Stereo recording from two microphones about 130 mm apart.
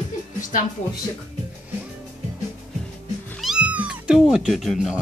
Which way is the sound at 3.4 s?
5° right (ahead or behind).